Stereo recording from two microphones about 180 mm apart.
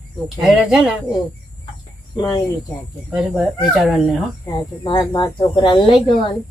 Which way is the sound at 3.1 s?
Centre (ahead or behind).